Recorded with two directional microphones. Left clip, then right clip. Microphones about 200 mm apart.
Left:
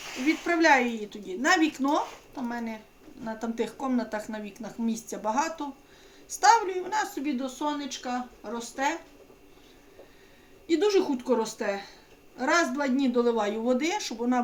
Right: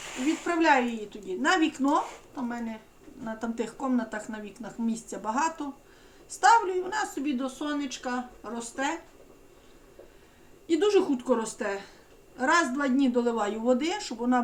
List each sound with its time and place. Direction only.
0.4 s a woman's voice: 20° left (ahead or behind)
10.7 s a woman's voice: 10° left (ahead or behind)